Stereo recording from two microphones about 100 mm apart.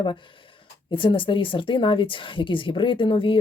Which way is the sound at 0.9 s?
55° left (ahead or behind).